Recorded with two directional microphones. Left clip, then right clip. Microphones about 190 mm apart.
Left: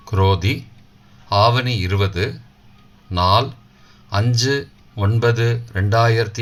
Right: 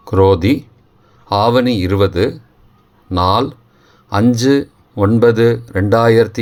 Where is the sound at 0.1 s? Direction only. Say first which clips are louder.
Right 8 dB; 45° right (ahead or behind).